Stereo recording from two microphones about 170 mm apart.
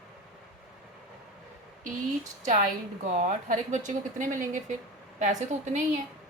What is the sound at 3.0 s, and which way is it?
Speech, 45° right (ahead or behind).